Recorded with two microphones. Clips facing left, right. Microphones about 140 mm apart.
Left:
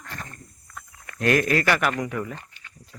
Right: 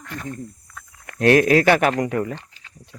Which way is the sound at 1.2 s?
70° right (ahead or behind).